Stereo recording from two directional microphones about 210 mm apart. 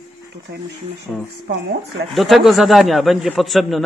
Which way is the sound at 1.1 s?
5° left (ahead or behind).